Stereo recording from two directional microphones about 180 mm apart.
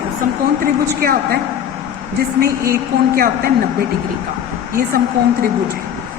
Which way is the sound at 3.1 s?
55° right (ahead or behind).